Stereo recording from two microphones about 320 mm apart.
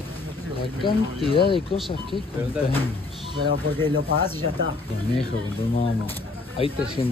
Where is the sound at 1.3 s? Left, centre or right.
Centre.